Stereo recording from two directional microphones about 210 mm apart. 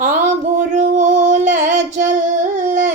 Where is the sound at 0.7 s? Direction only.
35° right (ahead or behind).